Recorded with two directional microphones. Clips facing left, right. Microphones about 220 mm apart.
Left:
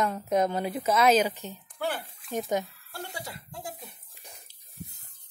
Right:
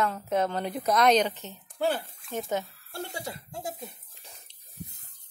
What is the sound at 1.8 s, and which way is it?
Speech, 25° right (ahead or behind).